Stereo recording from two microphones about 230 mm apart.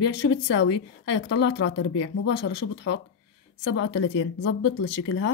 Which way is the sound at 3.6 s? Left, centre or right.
Left.